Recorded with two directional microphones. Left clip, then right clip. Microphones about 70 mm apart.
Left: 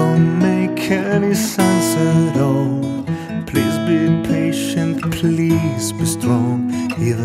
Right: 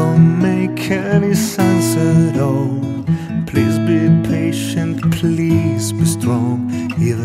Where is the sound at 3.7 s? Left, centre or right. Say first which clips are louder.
Even; centre.